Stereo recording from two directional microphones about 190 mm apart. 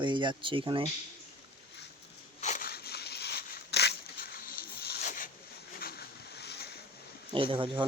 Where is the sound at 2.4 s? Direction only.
45° left (ahead or behind).